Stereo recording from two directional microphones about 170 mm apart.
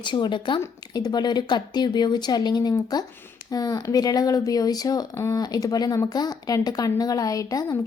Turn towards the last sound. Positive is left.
turn(degrees=20)  # may be behind; listen again after turning